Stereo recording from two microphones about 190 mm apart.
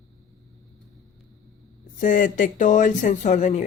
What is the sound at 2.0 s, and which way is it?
Speech, 45° left (ahead or behind).